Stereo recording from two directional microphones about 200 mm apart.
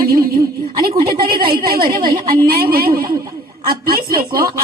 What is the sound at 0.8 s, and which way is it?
Speech, 50° right (ahead or behind).